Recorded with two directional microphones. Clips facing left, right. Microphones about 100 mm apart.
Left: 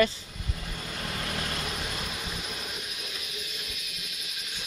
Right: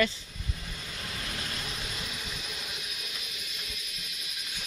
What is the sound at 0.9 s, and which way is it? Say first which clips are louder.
Vehicle: left 5 dB; 50° left (ahead or behind).